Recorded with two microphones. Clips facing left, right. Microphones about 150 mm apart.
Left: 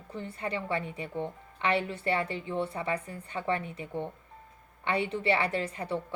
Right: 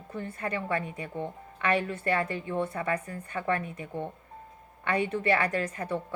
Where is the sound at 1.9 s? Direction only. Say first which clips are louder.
Right 1 dB; 20° left (ahead or behind).